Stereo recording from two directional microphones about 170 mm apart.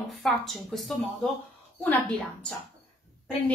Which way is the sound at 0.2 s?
Centre (ahead or behind).